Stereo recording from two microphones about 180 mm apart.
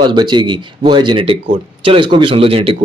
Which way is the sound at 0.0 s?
25° right (ahead or behind).